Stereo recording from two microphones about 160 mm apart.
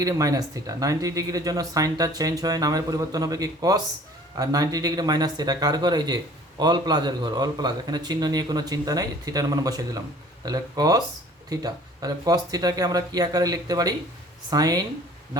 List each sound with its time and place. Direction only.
0.0 s speech: 20° right (ahead or behind)